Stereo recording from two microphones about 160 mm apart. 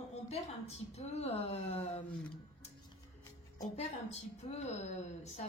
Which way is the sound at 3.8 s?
45° left (ahead or behind).